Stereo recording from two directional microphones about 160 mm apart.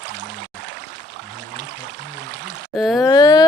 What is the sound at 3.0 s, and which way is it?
Speech, 25° left (ahead or behind).